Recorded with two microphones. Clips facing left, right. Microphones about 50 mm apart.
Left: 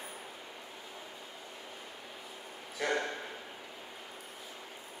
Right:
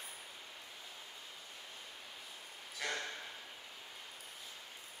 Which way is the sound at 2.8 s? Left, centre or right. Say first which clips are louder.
Left 8 dB; left.